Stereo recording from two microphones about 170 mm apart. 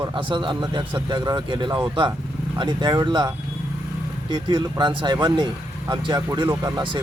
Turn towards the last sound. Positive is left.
turn(degrees=-25)  # may be behind; listen again after turning